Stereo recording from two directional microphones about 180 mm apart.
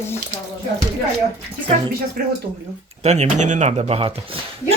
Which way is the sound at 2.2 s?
55° right (ahead or behind).